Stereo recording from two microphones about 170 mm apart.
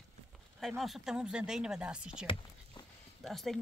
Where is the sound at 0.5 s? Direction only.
Centre (ahead or behind).